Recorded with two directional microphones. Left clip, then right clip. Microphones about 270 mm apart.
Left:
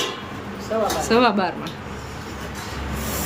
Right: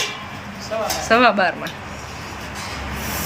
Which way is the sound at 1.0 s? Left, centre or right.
Centre.